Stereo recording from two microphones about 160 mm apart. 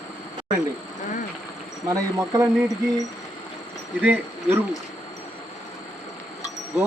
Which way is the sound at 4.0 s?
10° right (ahead or behind).